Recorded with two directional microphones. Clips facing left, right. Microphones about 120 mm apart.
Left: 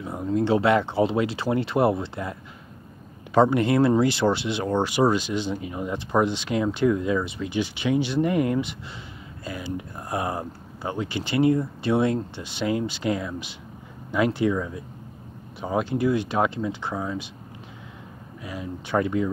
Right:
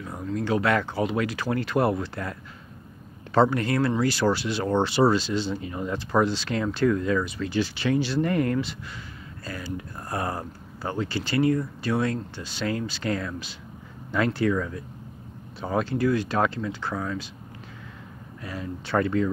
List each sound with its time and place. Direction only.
0.0 s speech: 20° left (ahead or behind)
3.3 s speech: 20° left (ahead or behind)
4.6 s speech: 10° left (ahead or behind)
18.4 s speech: 10° left (ahead or behind)